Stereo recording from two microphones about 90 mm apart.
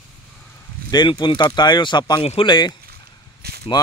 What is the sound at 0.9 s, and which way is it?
A man's voice, 55° left (ahead or behind).